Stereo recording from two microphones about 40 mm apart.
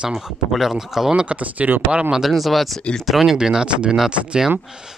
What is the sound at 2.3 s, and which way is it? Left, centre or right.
Speech, centre.